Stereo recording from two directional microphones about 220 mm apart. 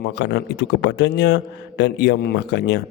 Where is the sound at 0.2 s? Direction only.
50° left (ahead or behind).